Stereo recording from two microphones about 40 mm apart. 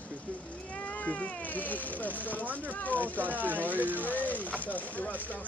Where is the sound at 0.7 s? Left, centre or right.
Left.